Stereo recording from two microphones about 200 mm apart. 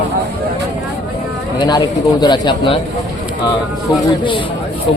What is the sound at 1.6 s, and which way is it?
Speech, 20° left (ahead or behind).